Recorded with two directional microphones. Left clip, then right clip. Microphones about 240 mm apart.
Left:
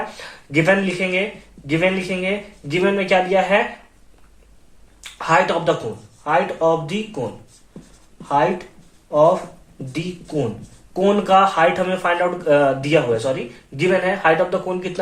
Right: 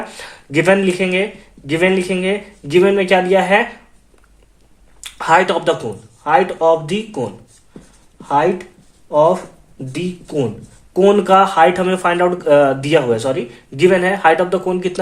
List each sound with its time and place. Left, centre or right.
0.5 s speech: right
4.9 s speech: right
8.3 s speech: right
9.9 s speech: right